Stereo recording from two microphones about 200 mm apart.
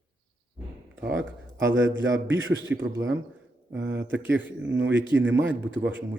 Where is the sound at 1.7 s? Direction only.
70° right (ahead or behind).